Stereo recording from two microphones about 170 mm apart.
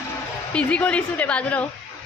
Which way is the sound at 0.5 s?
5° left (ahead or behind).